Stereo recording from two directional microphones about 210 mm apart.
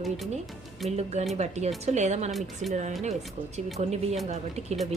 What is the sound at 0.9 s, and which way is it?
A woman's voice, 30° right (ahead or behind).